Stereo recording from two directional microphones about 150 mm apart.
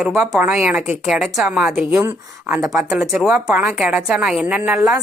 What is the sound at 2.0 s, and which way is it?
Speech, 15° right (ahead or behind).